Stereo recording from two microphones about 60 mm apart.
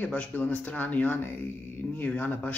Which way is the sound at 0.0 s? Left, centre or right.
Left.